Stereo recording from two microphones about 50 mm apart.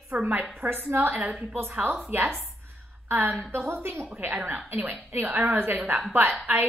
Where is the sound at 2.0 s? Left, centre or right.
Right.